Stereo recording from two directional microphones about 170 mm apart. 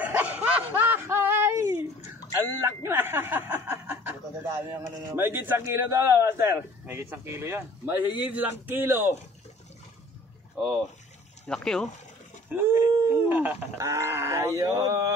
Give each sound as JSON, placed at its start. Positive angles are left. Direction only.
{"t": 0.0, "sound": "a sound", "side_deg": -10}
{"t": 2.6, "sound": "speech", "side_deg": -15}
{"t": 10.5, "sound": "speech", "side_deg": -5}
{"t": 12.4, "sound": "dog", "side_deg": -15}
{"t": 13.0, "sound": "speech", "side_deg": -15}